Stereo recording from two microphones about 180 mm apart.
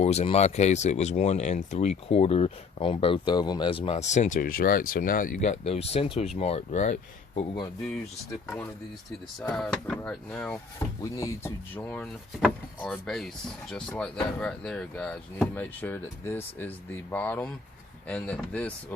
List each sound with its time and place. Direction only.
0.0 s speech: 35° left (ahead or behind)
9.4 s speech: 5° left (ahead or behind)